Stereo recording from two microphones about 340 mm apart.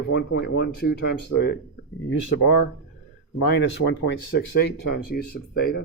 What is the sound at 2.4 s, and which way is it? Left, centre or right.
Speech, left.